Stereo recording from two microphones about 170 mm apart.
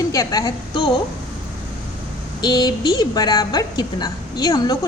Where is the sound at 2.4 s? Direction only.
25° left (ahead or behind).